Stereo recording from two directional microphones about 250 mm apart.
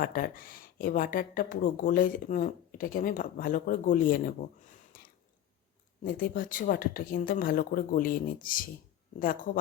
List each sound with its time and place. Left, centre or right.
0.0 s speech: left
4.9 s a sound: left
6.1 s speech: left